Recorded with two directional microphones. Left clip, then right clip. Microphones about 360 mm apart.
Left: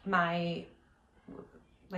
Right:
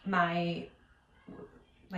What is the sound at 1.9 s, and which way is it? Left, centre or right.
Speech, centre.